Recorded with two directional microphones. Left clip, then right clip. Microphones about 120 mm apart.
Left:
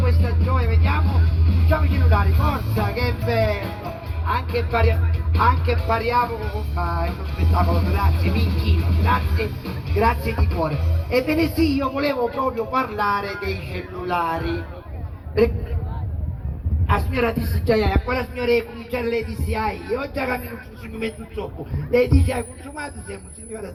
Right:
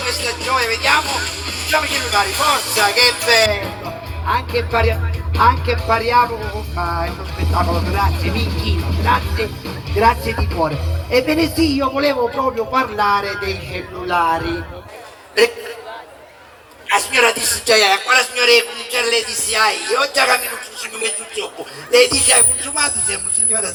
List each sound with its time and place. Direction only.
0.3 s music: 40° right (ahead or behind)
4.5 s speech: 40° right (ahead or behind)
17.1 s speech: 40° right (ahead or behind)
21.9 s speech: 40° right (ahead or behind)